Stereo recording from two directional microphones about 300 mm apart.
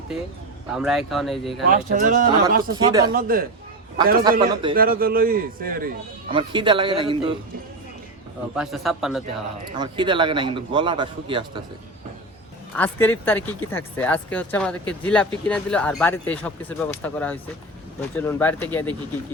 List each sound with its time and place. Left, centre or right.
0.7 s speech: centre
1.7 s speech: right
2.7 s a man's voice: centre
3.1 s speech: right
4.2 s a man's voice: centre
4.7 s speech: right
6.3 s a man's voice: centre
8.5 s speech: centre
9.7 s a man's voice: centre
12.7 s speech: centre